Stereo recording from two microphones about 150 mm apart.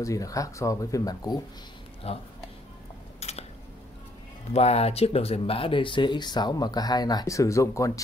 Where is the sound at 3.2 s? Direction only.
45° left (ahead or behind).